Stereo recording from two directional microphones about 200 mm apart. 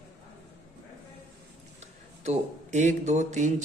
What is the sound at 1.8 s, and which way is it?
Speech, 35° right (ahead or behind).